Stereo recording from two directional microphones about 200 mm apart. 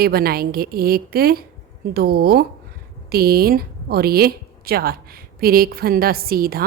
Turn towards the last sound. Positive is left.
turn(degrees=-45)  # may be behind; listen again after turning